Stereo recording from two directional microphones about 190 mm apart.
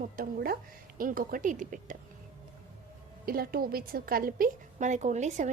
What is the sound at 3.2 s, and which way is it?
A woman's voice, 50° right (ahead or behind).